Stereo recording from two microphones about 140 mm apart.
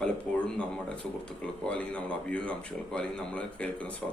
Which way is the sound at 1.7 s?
10° left (ahead or behind).